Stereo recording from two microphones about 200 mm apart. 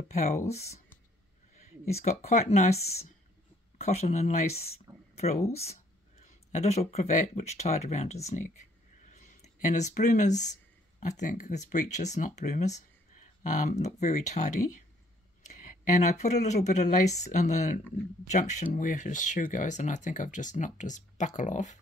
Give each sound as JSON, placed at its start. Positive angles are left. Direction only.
{"t": 0.1, "sound": "speech", "side_deg": 35}